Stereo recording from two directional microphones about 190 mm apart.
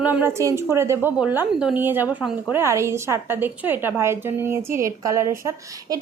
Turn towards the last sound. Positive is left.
turn(degrees=-15)  # may be behind; listen again after turning